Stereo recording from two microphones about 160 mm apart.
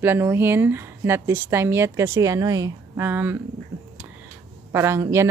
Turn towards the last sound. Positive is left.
turn(degrees=-15)  # may be behind; listen again after turning